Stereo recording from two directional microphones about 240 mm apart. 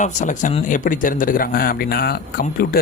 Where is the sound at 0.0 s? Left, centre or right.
Left.